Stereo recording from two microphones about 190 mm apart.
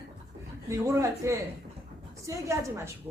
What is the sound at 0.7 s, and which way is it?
A woman's voice, 15° right (ahead or behind).